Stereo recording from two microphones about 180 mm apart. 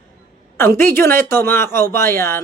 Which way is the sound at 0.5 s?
15° left (ahead or behind).